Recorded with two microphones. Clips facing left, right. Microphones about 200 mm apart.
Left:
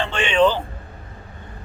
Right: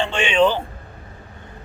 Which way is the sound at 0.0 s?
15° right (ahead or behind).